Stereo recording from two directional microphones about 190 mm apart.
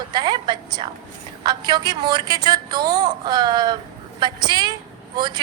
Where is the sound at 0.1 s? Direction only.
20° right (ahead or behind).